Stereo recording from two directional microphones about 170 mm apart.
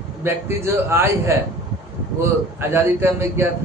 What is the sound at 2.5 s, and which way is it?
Speech, 15° right (ahead or behind).